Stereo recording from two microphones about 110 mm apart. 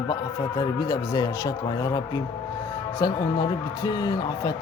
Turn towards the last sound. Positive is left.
turn(degrees=35)  # may be behind; listen again after turning